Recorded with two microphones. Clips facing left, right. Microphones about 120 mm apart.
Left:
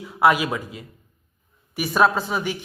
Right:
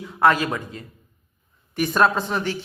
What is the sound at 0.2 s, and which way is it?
Speech, 10° left (ahead or behind).